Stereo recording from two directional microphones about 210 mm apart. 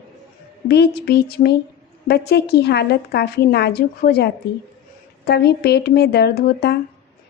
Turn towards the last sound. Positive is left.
turn(degrees=50)  # may be behind; listen again after turning